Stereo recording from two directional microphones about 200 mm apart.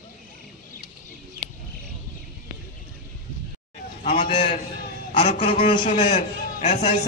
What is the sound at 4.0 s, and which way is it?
A man's voice, 35° left (ahead or behind).